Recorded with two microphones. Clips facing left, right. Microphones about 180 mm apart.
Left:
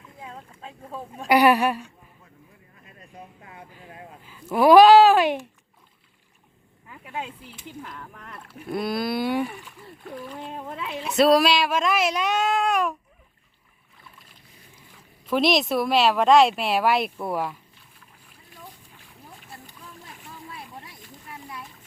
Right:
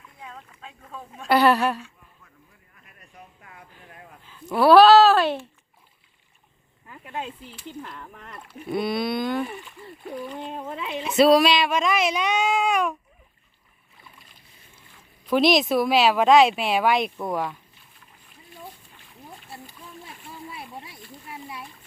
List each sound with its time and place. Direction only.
0.2 s boat: 30° left (ahead or behind)
0.9 s speech: 10° left (ahead or behind)
3.4 s speech: 25° left (ahead or behind)
4.2 s speech: 5° left (ahead or behind)
6.8 s speech: 5° left (ahead or behind)
7.9 s speech: centre (ahead or behind)
14.9 s speech: centre (ahead or behind)
18.9 s boat: 5° left (ahead or behind)
21.2 s splash: 10° right (ahead or behind)